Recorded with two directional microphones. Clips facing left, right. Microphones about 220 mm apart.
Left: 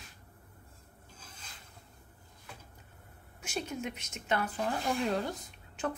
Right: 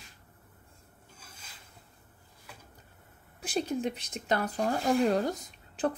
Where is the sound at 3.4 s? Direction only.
35° right (ahead or behind).